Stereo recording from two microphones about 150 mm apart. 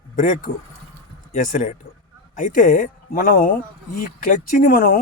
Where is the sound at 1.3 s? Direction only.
55° left (ahead or behind).